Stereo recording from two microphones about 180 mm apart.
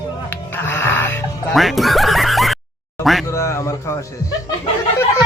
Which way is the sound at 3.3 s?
15° left (ahead or behind).